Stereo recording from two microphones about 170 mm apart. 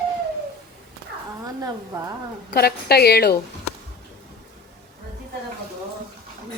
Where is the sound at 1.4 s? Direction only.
20° right (ahead or behind).